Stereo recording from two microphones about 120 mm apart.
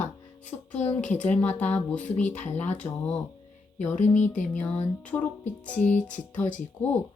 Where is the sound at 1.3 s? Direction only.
15° left (ahead or behind).